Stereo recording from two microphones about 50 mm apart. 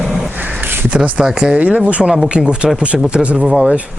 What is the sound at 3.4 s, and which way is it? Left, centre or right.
Speech, centre.